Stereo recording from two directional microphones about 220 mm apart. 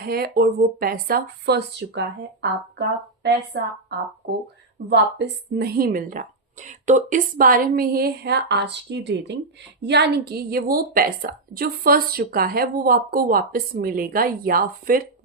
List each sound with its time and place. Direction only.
0.0 s a woman's voice: 45° right (ahead or behind)
4.9 s a woman's voice: 50° right (ahead or behind)